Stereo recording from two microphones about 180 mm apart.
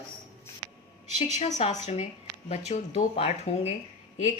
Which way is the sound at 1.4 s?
35° left (ahead or behind).